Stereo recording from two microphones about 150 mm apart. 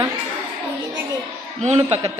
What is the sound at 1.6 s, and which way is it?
Speech, 45° right (ahead or behind).